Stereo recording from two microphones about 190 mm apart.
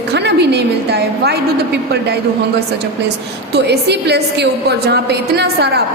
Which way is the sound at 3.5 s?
60° right (ahead or behind).